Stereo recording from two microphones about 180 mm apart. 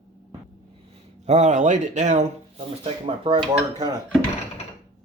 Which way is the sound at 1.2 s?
40° right (ahead or behind).